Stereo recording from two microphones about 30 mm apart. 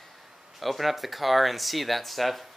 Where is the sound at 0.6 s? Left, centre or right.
Centre.